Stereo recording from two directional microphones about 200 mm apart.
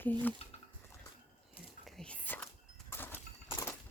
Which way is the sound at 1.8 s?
5° left (ahead or behind).